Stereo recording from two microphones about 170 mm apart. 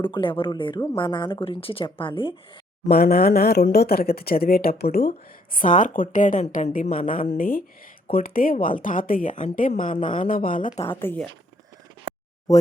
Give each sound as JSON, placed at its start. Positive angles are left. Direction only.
{"t": 0.0, "sound": "speech", "side_deg": 30}
{"t": 2.9, "sound": "speech", "side_deg": 65}
{"t": 11.0, "sound": "speech", "side_deg": 10}